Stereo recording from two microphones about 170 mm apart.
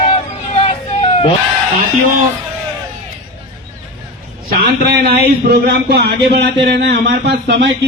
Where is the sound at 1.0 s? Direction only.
35° left (ahead or behind).